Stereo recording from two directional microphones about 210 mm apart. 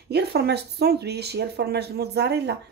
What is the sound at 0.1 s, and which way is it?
Speech, 50° right (ahead or behind).